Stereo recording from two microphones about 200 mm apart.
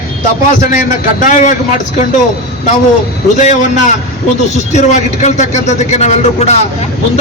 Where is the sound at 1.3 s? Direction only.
40° left (ahead or behind).